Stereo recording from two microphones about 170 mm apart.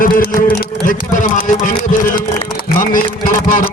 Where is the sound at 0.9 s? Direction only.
50° left (ahead or behind).